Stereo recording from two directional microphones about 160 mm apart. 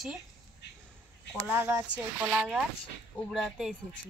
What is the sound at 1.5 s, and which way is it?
Speech, 15° right (ahead or behind).